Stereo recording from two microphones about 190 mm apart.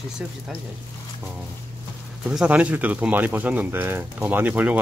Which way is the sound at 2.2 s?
5° right (ahead or behind).